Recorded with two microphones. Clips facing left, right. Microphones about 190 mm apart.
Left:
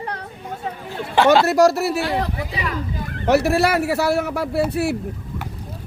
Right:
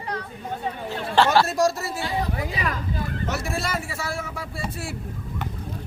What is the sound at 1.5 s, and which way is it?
Speech, 70° left (ahead or behind).